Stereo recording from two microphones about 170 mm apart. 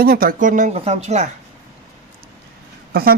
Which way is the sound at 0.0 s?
60° right (ahead or behind).